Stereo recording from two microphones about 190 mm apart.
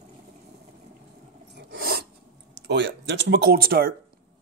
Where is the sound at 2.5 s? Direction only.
65° right (ahead or behind).